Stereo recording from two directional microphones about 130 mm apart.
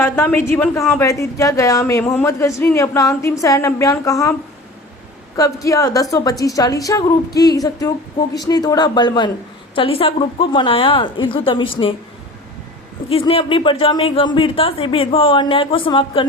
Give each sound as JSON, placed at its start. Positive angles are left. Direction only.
{"t": 0.0, "sound": "a woman's voice", "side_deg": 20}
{"t": 5.4, "sound": "a woman's voice", "side_deg": 25}
{"t": 9.7, "sound": "a woman's voice", "side_deg": 45}
{"t": 13.1, "sound": "speech", "side_deg": 45}